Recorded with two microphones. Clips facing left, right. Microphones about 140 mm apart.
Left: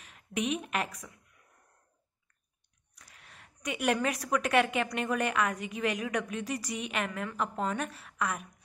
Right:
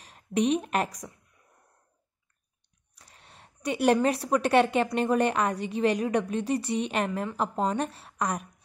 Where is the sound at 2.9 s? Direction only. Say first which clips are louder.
Right 2 dB; 30° right (ahead or behind).